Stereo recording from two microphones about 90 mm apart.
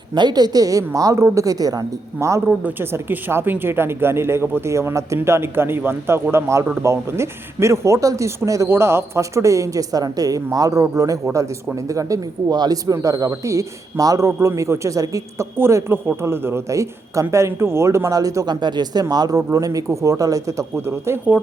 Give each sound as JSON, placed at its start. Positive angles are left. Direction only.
{"t": 0.1, "sound": "a woman's voice", "side_deg": -50}
{"t": 15.5, "sound": "a woman's voice", "side_deg": -25}
{"t": 18.6, "sound": "a woman's voice", "side_deg": -50}